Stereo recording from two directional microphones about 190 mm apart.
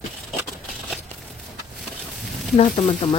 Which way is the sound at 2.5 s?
35° left (ahead or behind).